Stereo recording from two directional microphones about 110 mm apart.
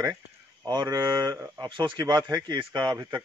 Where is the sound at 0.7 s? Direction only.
40° right (ahead or behind).